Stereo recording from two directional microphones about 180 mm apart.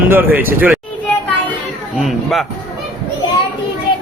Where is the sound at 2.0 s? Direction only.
Centre (ahead or behind).